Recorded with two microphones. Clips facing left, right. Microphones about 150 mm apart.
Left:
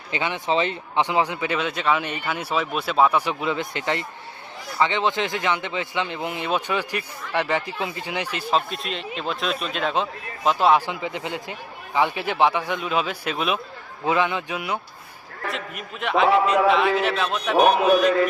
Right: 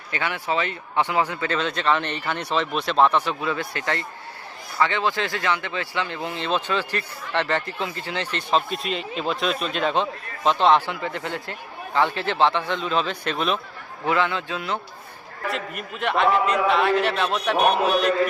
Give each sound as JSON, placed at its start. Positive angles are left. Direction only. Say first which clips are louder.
{"t": 0.1, "sound": "speech", "louder": "left 2 dB", "side_deg": 20}
{"t": 10.8, "sound": "speech", "louder": "even", "side_deg": 15}
{"t": 15.4, "sound": "a man's voice", "louder": "right 2 dB", "side_deg": 0}